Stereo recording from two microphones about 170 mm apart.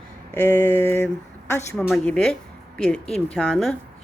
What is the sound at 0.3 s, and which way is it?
A woman's voice, 10° left (ahead or behind).